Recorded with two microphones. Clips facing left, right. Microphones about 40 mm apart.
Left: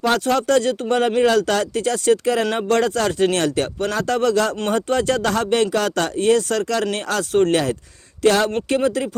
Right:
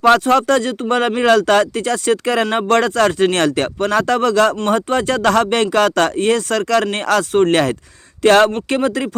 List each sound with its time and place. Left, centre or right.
0.0 s speech: right